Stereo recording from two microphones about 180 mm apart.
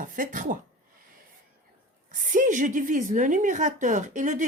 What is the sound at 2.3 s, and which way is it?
A woman's voice, 45° right (ahead or behind).